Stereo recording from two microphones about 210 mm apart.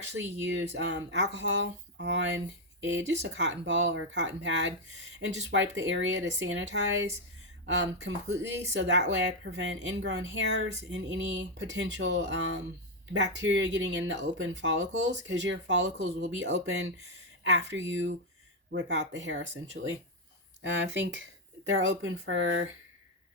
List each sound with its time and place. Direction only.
0.4 s a woman's voice: 60° right (ahead or behind)